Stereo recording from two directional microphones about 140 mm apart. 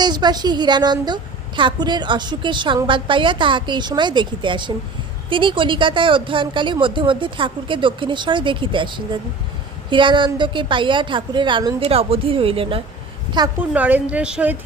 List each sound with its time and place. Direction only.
0.0 s a woman's voice: 30° right (ahead or behind)
9.9 s a woman's voice: 35° right (ahead or behind)
13.6 s a woman's voice: 10° right (ahead or behind)